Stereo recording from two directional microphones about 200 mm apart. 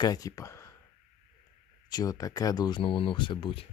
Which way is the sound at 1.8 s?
20° left (ahead or behind).